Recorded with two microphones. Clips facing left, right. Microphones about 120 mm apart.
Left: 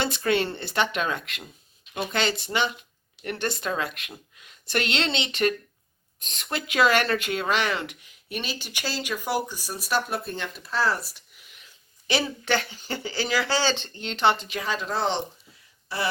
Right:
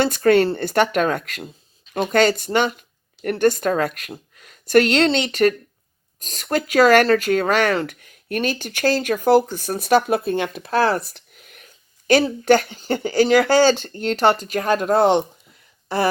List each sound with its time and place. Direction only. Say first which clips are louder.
0.0 s speech: right 9 dB; 45° right (ahead or behind)